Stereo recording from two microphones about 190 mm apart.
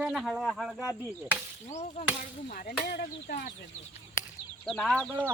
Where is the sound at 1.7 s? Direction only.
35° left (ahead or behind).